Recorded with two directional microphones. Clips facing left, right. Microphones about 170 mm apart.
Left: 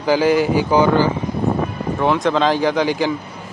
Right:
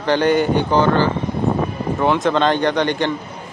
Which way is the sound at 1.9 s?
Centre (ahead or behind).